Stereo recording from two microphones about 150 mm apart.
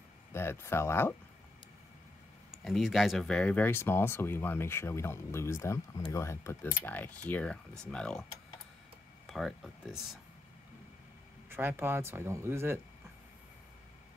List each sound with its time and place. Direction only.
0.3 s speech: 15° left (ahead or behind)
2.6 s speech: centre (ahead or behind)
9.3 s speech: centre (ahead or behind)
11.4 s speech: 15° right (ahead or behind)